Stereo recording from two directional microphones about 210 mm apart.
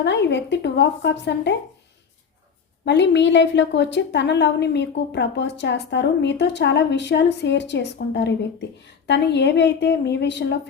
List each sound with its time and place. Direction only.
0.0 s a woman's voice: 55° left (ahead or behind)
2.8 s a woman's voice: 55° left (ahead or behind)